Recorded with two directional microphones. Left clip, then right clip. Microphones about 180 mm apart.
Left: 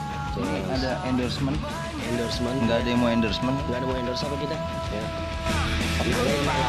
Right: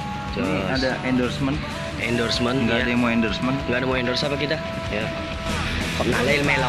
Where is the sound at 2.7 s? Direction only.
70° left (ahead or behind).